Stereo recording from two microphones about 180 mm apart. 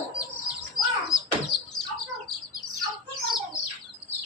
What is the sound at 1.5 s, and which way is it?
Bird, centre (ahead or behind).